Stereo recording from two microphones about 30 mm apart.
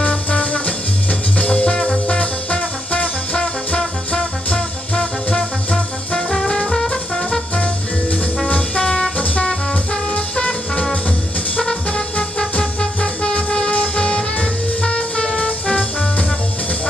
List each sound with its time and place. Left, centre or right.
0.3 s music: left
3.3 s music: left
6.4 s music: left
7.5 s music: left
8.5 s brass instrument: left
9.2 s music: left
11.5 s music: left